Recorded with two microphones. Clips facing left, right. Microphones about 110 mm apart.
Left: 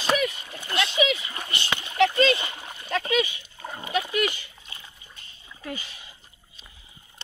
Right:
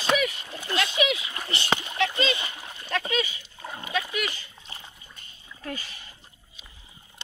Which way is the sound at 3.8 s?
20° left (ahead or behind).